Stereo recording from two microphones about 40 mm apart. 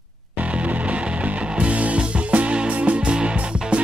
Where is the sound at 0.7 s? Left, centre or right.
Right.